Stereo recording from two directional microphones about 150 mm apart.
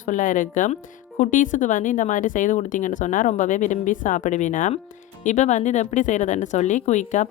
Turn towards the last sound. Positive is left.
turn(degrees=55)  # may be behind; listen again after turning